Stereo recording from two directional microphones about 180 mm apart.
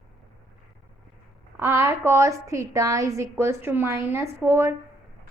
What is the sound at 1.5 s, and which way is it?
A woman's voice, 15° right (ahead or behind).